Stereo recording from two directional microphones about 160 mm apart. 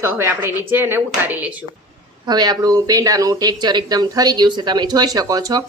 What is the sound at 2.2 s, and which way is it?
Speech, 25° right (ahead or behind).